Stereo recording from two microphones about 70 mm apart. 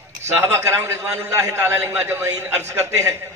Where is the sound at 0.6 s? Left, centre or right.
Right.